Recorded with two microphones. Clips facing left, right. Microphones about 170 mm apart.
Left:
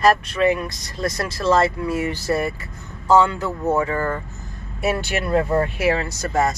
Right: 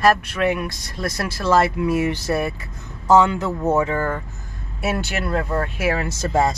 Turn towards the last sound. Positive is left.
turn(degrees=-25)  # may be behind; listen again after turning